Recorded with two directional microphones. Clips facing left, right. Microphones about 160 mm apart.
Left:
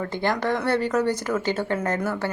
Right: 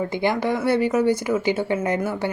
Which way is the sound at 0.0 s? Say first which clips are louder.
Right 3 dB; 10° right (ahead or behind).